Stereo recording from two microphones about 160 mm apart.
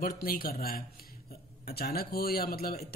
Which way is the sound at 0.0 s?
70° left (ahead or behind).